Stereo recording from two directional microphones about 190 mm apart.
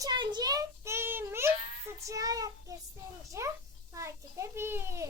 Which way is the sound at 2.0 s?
15° right (ahead or behind).